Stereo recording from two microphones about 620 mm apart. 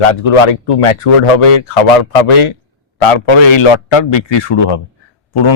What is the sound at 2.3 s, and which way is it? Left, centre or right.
Speech, left.